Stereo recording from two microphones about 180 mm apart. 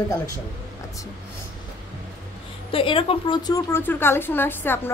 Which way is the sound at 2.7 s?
30° left (ahead or behind).